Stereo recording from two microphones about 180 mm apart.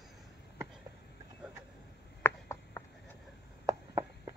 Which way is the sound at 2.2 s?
15° left (ahead or behind).